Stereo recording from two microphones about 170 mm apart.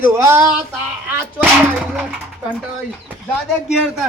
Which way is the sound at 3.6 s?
5° right (ahead or behind).